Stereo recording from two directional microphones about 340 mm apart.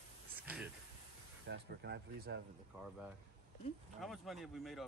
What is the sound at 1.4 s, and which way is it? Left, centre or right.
Speech, right.